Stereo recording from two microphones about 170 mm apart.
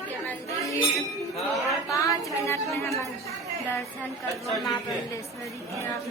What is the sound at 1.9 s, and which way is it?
Child singing, 20° left (ahead or behind).